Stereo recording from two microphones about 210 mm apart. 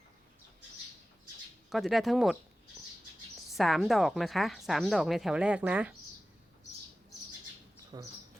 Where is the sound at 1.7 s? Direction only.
Centre (ahead or behind).